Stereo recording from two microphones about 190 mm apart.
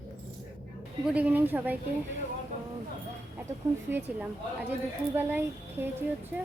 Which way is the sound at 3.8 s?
10° right (ahead or behind).